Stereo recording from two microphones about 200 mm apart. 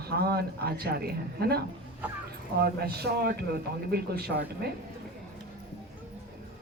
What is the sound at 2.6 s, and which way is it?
A man's voice, 50° right (ahead or behind).